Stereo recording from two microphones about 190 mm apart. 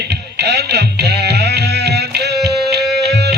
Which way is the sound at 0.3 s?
60° right (ahead or behind).